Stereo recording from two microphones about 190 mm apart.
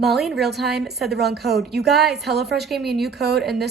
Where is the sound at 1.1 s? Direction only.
60° right (ahead or behind).